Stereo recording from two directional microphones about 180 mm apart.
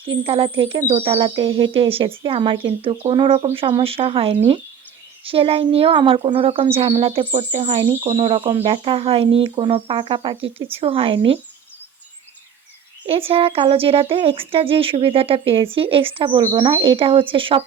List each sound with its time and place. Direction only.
0.3 s speech: 30° right (ahead or behind)
13.1 s speech: 30° right (ahead or behind)